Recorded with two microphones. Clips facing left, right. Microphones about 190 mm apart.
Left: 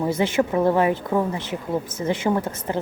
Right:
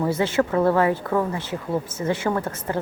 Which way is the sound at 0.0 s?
15° left (ahead or behind).